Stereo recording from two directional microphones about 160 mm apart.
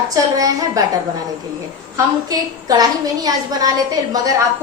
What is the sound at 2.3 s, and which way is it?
A woman's voice, 25° right (ahead or behind).